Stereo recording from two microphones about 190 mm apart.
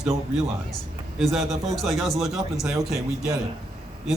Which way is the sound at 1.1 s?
Centre (ahead or behind).